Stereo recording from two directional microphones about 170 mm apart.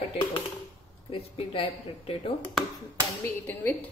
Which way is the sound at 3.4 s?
10° left (ahead or behind).